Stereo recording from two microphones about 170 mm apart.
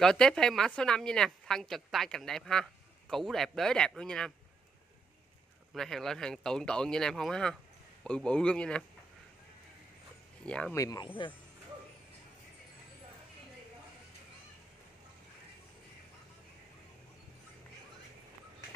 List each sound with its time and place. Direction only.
0.0 s a woman's voice: 5° left (ahead or behind)
5.7 s a woman's voice: centre (ahead or behind)
10.4 s speech: 5° left (ahead or behind)
10.8 s speech: 25° left (ahead or behind)